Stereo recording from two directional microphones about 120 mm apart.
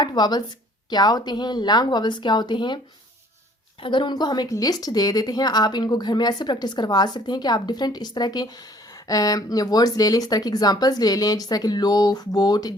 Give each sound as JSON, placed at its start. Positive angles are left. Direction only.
{"t": 0.0, "sound": "a woman's voice", "side_deg": 35}
{"t": 3.8, "sound": "a woman's voice", "side_deg": 40}